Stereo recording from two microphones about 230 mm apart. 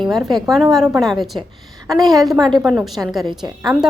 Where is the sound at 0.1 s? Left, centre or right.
Centre.